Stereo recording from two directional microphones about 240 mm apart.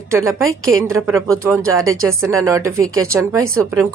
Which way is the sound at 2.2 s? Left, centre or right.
Centre.